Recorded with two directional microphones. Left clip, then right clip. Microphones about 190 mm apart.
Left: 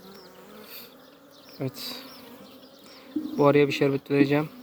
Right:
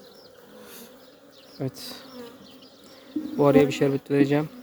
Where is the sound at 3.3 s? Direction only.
20° right (ahead or behind).